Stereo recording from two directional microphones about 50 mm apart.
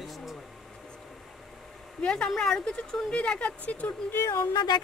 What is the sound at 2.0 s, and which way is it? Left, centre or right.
Speech, centre.